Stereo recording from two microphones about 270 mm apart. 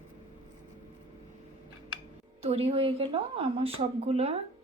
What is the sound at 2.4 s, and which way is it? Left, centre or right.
A woman's voice, right.